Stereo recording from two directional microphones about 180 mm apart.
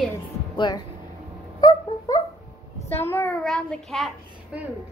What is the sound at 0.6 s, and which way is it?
Speech, 25° left (ahead or behind).